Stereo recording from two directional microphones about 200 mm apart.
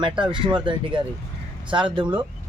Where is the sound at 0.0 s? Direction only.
25° right (ahead or behind).